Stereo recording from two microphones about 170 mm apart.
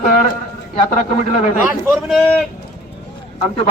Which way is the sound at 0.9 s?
45° left (ahead or behind).